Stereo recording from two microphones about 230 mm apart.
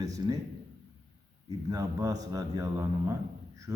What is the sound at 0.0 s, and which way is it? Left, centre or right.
Speech, centre.